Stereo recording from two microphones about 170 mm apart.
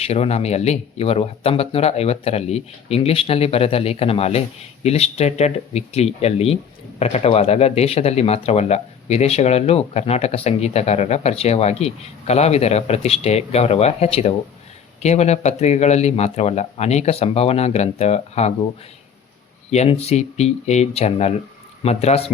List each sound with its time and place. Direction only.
0.0 s speech: 35° left (ahead or behind)
19.7 s speech: 40° left (ahead or behind)